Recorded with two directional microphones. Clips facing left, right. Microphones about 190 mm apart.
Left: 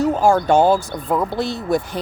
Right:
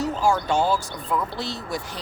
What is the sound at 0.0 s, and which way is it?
Speech, 55° left (ahead or behind).